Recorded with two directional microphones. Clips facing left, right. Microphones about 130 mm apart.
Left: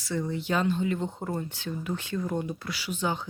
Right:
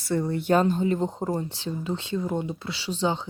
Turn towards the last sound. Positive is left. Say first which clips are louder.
# right 4 dB
turn(degrees=-25)  # may be behind; listen again after turning